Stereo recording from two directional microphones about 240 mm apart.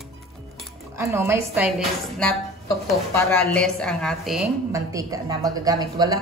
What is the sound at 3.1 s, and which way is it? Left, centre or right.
Speech, centre.